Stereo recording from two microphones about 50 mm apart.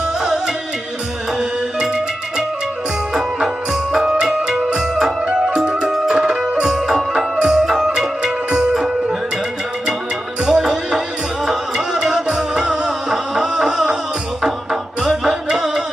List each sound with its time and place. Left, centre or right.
0.0 s music: centre
3.1 s music: centre
10.4 s music: centre